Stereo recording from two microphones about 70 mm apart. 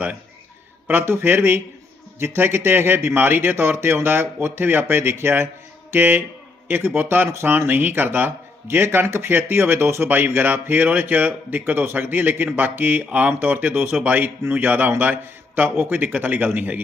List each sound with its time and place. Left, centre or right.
0.9 s speech: right